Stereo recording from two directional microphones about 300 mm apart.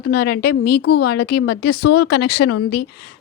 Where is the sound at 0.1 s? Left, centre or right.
Left.